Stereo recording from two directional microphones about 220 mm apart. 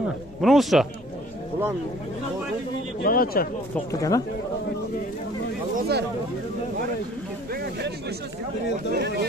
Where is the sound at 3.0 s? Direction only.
40° left (ahead or behind).